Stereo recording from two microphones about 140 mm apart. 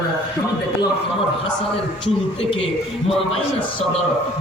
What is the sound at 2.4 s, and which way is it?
Speech, 40° left (ahead or behind).